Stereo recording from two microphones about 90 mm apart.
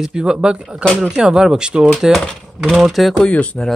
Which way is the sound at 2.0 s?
Centre (ahead or behind).